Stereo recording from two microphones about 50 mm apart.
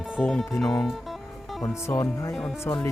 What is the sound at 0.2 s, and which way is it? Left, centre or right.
Speech, centre.